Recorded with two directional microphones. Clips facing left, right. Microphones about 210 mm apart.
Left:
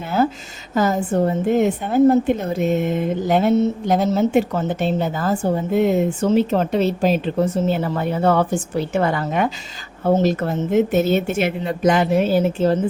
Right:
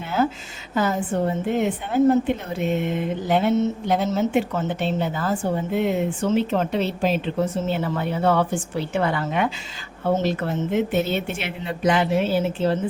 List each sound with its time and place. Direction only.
0.7 s a woman's voice: 40° left (ahead or behind)